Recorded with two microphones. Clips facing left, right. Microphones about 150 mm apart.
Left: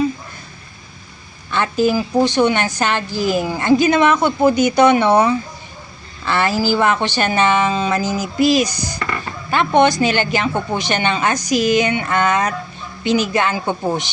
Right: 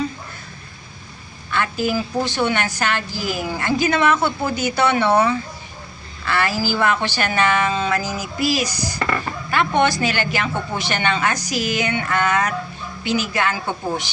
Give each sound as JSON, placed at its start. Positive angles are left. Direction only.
{"t": 1.5, "sound": "a woman's voice", "side_deg": 25}